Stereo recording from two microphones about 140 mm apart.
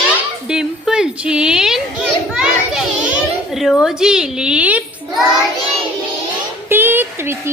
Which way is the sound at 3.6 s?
Centre (ahead or behind).